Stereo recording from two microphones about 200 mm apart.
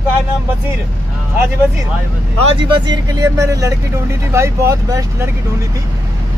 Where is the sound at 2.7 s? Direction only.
25° right (ahead or behind).